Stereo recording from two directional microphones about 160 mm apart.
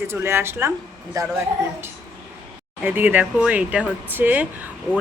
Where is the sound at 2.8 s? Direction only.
10° right (ahead or behind).